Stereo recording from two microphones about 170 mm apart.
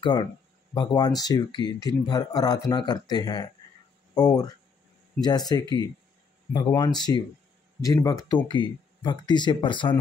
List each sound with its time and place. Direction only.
0.0 s speech: 25° left (ahead or behind)